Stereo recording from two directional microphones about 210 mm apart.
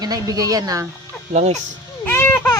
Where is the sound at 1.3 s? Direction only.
30° right (ahead or behind).